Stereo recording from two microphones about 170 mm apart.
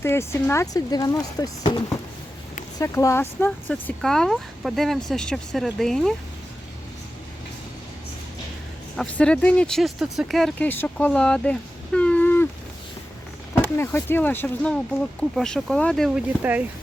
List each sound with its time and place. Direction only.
0.0 s speech: 15° left (ahead or behind)
9.0 s speech: 5° left (ahead or behind)
11.9 s a sound: 10° left (ahead or behind)
13.5 s speech: 15° left (ahead or behind); by 16.6 s 10° right (ahead or behind)